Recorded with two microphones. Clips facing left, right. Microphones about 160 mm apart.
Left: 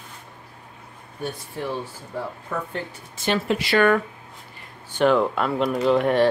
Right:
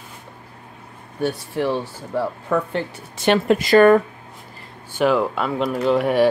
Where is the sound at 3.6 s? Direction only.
40° right (ahead or behind).